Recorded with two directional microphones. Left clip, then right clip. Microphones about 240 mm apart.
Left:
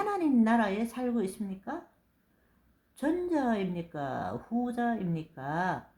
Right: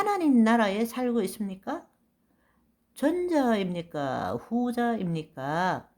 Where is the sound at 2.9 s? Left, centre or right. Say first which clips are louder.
Right 4 dB; right.